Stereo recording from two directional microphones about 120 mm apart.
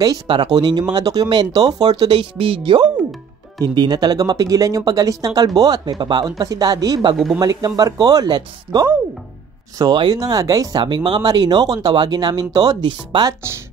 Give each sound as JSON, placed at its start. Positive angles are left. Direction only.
{"t": 0.0, "sound": "speech", "side_deg": -35}